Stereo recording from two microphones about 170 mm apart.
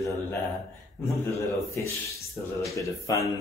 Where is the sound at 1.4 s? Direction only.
15° left (ahead or behind).